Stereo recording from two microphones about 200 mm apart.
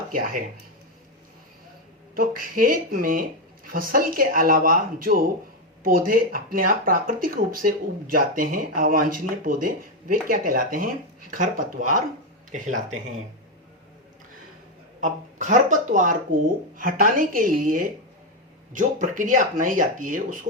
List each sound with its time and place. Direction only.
0.1 s speech: 45° right (ahead or behind)
2.1 s speech: 45° right (ahead or behind)
15.0 s speech: 40° right (ahead or behind)